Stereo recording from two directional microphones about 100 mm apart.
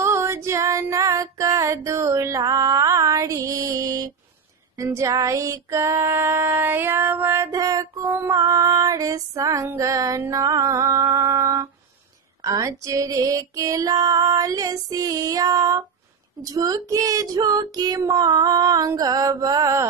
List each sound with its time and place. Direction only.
0.0 s female singing: 25° right (ahead or behind)
4.7 s child singing: 35° right (ahead or behind)
7.5 s female singing: 40° right (ahead or behind)